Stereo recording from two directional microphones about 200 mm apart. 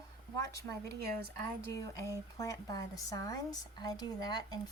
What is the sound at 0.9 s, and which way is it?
Speech, 50° right (ahead or behind).